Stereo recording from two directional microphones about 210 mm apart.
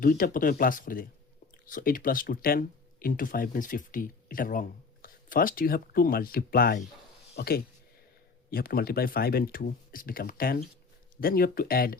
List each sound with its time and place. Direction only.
0.0 s speech: 40° left (ahead or behind)